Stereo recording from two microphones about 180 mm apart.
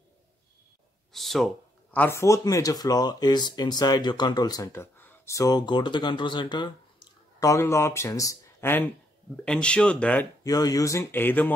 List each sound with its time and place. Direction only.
1.1 s speech: centre (ahead or behind)
10.4 s speech: 20° left (ahead or behind)